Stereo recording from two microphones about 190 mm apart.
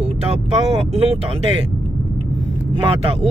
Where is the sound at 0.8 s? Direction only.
30° right (ahead or behind).